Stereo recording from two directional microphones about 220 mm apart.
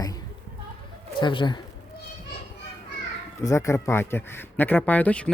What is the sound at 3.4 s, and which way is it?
Speech, 15° left (ahead or behind).